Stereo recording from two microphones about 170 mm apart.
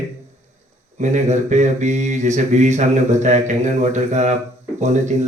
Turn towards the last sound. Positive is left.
turn(degrees=-45)  # may be behind; listen again after turning